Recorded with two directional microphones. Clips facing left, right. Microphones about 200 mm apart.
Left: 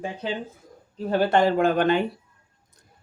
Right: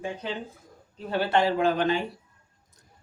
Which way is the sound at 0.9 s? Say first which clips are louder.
Left 4 dB; 40° left (ahead or behind).